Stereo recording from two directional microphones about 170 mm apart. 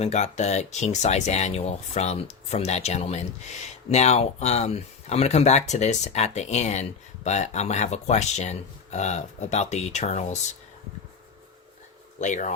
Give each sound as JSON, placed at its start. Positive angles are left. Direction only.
{"t": 0.0, "sound": "speech", "side_deg": 40}
{"t": 12.2, "sound": "speech", "side_deg": 45}